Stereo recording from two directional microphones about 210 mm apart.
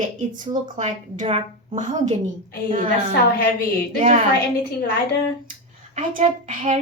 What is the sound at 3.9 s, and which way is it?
Speech, 35° right (ahead or behind).